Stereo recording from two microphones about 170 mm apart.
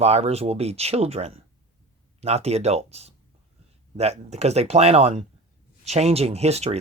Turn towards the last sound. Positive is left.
turn(degrees=-40)  # may be behind; listen again after turning